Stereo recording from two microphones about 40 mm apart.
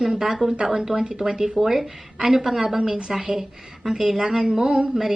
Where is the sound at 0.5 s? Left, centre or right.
Right.